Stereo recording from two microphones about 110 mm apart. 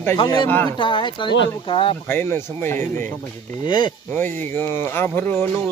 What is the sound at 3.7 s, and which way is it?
Speech, 40° left (ahead or behind).